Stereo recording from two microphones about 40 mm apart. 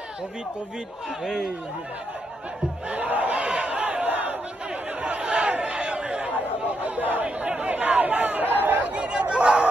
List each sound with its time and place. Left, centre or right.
2.9 s battle cry: right
5.0 s crowd: right
6.8 s chatter: right
7.3 s chatter: right
8.9 s chatter: right